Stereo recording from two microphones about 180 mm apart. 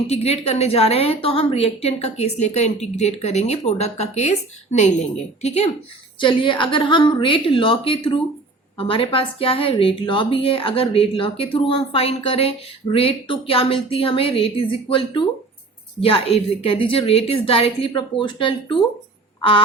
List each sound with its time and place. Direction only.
0.1 s a woman's voice: 35° left (ahead or behind)
16.0 s speech: 30° left (ahead or behind)
19.4 s quack: 30° left (ahead or behind)